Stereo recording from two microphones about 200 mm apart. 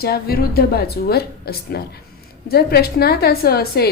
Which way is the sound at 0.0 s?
50° left (ahead or behind).